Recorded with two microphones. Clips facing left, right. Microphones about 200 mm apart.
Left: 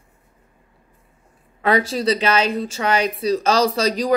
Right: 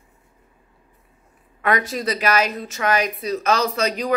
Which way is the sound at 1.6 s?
30° left (ahead or behind).